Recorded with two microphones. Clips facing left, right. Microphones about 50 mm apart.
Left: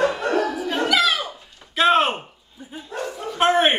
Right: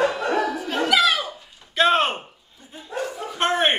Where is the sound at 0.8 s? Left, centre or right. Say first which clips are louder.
Right 1 dB; centre.